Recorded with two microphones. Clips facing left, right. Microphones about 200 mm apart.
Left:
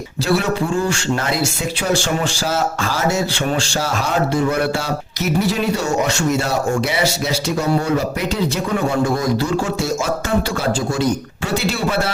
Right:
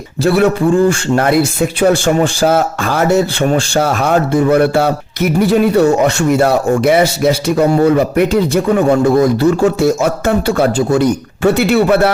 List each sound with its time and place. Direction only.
0.3 s speech: 55° right (ahead or behind)